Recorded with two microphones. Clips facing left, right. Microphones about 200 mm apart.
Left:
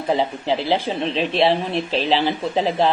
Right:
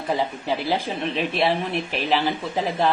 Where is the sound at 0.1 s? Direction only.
20° left (ahead or behind).